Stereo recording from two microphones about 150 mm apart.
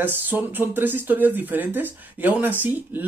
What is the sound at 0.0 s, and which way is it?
Speech, 15° right (ahead or behind).